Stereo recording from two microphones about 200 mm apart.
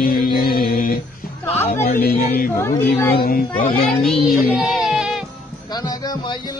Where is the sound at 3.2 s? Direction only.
45° left (ahead or behind).